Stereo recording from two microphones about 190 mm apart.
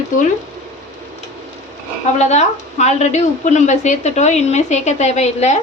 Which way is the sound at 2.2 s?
35° left (ahead or behind).